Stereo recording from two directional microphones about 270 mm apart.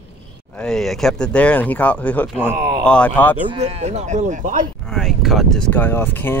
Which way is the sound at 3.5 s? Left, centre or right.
Right.